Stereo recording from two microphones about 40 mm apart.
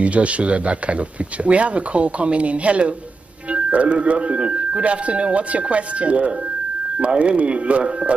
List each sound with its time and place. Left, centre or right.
0.0 s speech: right